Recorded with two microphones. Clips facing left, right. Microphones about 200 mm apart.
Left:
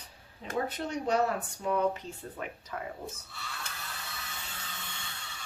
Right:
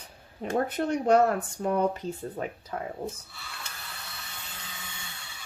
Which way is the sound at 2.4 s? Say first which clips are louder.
Right 5 dB; 30° right (ahead or behind).